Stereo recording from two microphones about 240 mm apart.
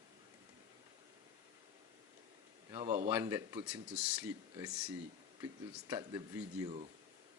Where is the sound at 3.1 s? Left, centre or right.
Centre.